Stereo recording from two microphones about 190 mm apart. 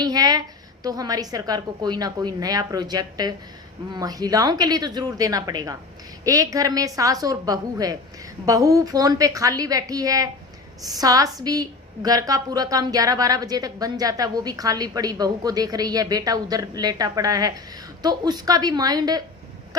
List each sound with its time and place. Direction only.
0.0 s speech: 20° right (ahead or behind)